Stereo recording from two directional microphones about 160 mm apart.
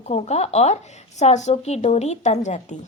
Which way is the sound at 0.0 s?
45° left (ahead or behind).